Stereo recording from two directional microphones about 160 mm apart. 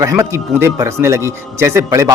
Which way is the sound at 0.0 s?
20° right (ahead or behind).